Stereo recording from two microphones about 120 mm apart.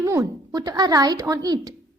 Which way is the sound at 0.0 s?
30° right (ahead or behind).